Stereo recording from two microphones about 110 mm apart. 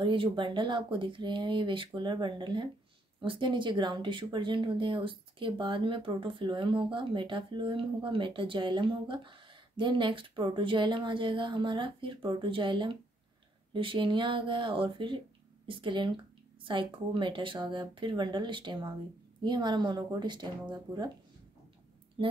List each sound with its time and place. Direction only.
0.0 s speech: 50° right (ahead or behind)
22.2 s speech: 50° right (ahead or behind)